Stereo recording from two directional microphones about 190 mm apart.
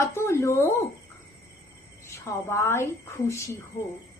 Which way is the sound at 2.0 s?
15° left (ahead or behind).